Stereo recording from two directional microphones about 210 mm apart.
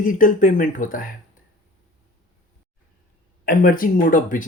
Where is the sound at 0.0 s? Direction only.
40° left (ahead or behind).